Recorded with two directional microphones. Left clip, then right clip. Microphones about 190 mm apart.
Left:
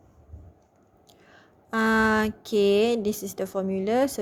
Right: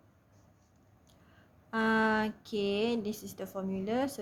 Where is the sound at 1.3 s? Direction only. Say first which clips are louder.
Left 7 dB; 35° left (ahead or behind).